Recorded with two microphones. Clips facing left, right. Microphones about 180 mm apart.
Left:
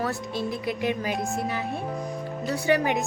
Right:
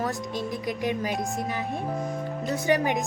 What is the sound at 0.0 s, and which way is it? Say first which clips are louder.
Music: left 1 dB; 15° right (ahead or behind).